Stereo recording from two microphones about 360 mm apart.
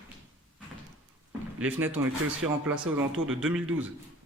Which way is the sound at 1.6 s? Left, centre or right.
Centre.